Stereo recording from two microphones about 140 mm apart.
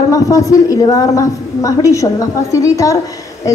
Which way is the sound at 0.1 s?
25° left (ahead or behind).